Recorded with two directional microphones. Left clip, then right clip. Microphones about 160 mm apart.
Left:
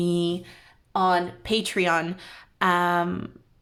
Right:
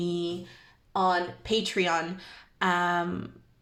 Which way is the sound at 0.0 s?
45° left (ahead or behind).